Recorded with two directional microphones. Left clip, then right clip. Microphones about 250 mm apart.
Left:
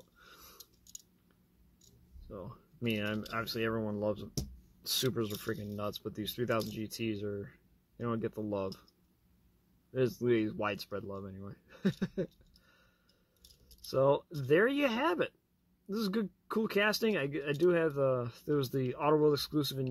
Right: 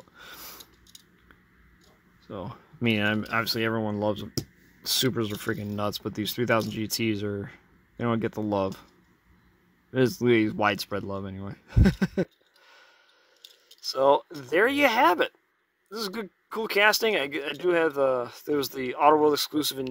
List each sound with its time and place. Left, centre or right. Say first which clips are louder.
0.2 s a sound: right 13 dB; right
2.2 s speech: right 9 dB; centre
9.9 s speech: right 8 dB; centre
13.8 s speech: right 7 dB; centre